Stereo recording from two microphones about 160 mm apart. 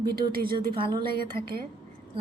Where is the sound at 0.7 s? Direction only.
30° right (ahead or behind).